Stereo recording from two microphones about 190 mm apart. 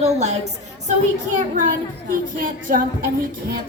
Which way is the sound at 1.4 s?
45° right (ahead or behind).